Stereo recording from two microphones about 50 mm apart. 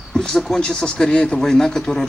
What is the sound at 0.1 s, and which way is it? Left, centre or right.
Speech, centre.